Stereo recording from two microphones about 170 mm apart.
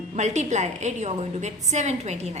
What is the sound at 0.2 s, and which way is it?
A woman's voice, 45° right (ahead or behind).